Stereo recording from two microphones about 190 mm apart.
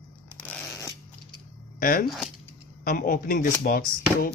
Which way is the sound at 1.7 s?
50° left (ahead or behind).